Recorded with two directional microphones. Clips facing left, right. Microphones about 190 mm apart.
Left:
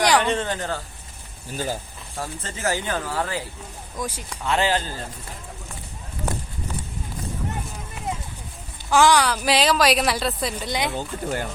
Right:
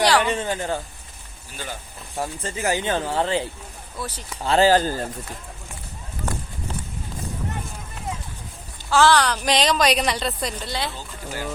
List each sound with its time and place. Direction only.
0.2 s speech: 10° right (ahead or behind)
1.5 s speech: 40° left (ahead or behind)
2.1 s speech: 15° right (ahead or behind)
3.9 s speech: 10° left (ahead or behind)
4.4 s speech: 35° right (ahead or behind)
8.9 s a woman's voice: 15° left (ahead or behind)
10.7 s speech: 15° left (ahead or behind)
10.9 s speech: 55° left (ahead or behind)